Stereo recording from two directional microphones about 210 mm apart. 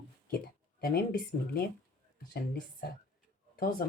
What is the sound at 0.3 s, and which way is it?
Speech, 45° left (ahead or behind).